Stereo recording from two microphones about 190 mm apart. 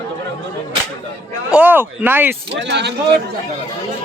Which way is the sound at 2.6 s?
65° right (ahead or behind).